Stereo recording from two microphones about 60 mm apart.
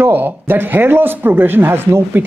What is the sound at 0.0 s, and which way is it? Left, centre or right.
Speech, right.